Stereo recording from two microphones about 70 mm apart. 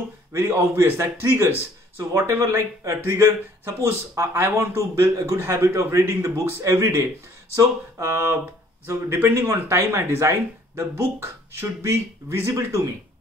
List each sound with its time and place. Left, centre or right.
0.3 s a man's voice: right